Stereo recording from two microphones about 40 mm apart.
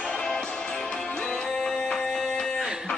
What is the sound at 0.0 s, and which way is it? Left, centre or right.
Music, centre.